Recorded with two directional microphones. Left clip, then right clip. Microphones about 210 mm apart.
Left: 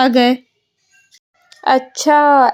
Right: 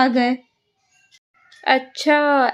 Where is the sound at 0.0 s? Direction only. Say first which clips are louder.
Left 5 dB; 35° left (ahead or behind).